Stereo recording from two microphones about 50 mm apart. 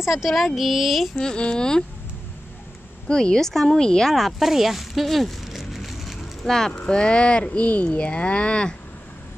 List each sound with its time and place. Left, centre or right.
0.0 s speech: centre
0.6 s a sound: centre
1.1 s speech: centre
3.1 s speech: centre
4.1 s a sound: centre
6.5 s speech: centre